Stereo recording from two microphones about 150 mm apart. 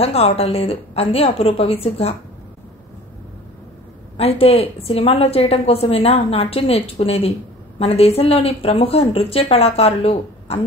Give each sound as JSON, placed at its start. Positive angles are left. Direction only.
{"t": 0.0, "sound": "a woman's voice", "side_deg": 40}
{"t": 4.2, "sound": "a woman's voice", "side_deg": 40}